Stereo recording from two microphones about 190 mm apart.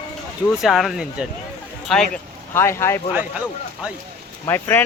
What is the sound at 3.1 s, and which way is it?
Speech, 5° right (ahead or behind).